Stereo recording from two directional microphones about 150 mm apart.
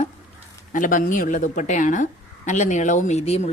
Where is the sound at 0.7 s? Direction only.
65° left (ahead or behind).